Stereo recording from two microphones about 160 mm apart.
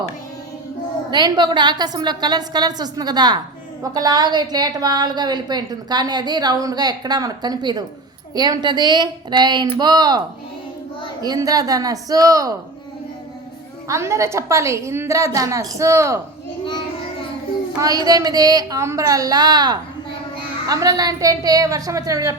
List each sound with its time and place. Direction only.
1.1 s a woman's voice: 30° right (ahead or behind)
11.2 s a woman's voice: 25° right (ahead or behind)
13.8 s a woman's voice: 20° right (ahead or behind)
17.7 s a woman's voice: 25° right (ahead or behind)